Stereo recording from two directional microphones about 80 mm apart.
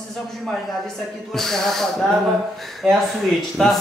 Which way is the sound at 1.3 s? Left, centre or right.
Centre.